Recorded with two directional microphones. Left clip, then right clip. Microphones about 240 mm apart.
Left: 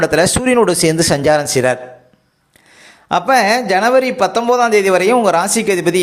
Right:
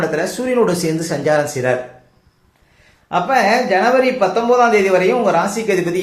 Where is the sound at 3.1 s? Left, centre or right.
Left.